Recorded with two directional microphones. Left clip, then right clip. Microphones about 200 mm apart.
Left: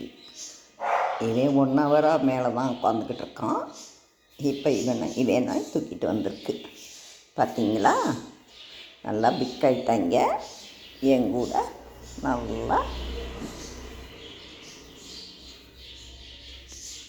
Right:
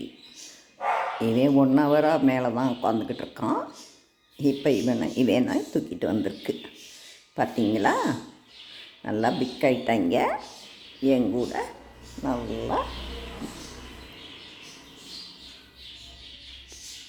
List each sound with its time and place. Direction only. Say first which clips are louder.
1.2 s a man's voice: right 1 dB; 20° right (ahead or behind)